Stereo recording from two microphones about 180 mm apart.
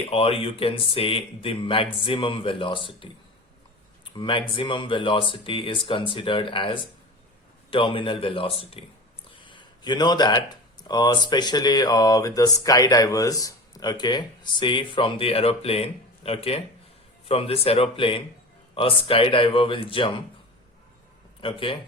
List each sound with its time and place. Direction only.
0.1 s speech: 30° left (ahead or behind)
4.2 s speech: 30° left (ahead or behind)
21.4 s speech: 30° left (ahead or behind)